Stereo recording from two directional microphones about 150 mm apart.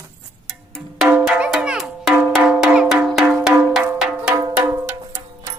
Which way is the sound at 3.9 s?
5° right (ahead or behind).